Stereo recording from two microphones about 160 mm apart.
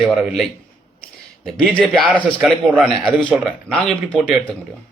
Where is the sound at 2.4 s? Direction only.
Centre (ahead or behind).